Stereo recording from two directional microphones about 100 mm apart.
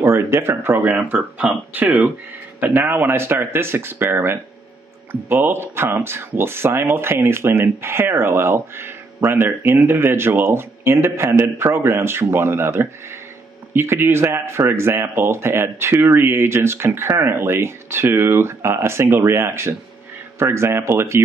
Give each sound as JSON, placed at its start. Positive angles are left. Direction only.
{"t": 0.0, "sound": "speech", "side_deg": -25}